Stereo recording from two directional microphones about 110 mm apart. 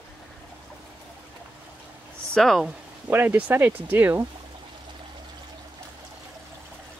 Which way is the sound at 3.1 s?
20° right (ahead or behind).